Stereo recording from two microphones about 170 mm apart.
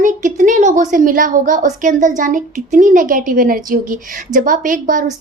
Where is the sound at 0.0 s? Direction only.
50° right (ahead or behind).